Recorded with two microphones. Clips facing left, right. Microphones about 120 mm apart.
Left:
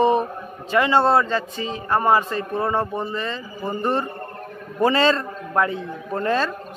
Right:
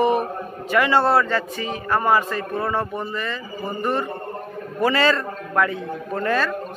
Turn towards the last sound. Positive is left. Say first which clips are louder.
# even
turn(degrees=25)  # may be behind; listen again after turning